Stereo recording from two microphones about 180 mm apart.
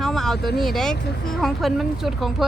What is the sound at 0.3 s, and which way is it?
Speech, 60° left (ahead or behind).